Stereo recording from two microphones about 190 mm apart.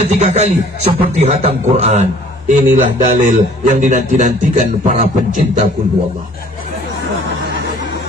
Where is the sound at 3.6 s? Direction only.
40° right (ahead or behind).